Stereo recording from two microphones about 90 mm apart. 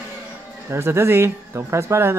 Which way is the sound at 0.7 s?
30° right (ahead or behind).